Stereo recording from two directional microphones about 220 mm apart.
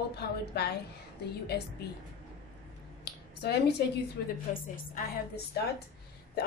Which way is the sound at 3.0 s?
50° left (ahead or behind).